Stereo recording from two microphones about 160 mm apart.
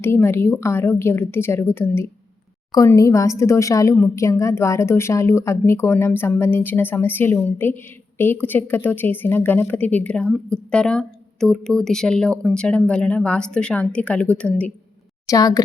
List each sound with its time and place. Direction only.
0.0 s a woman's voice: 15° left (ahead or behind)
15.3 s speech: 20° left (ahead or behind)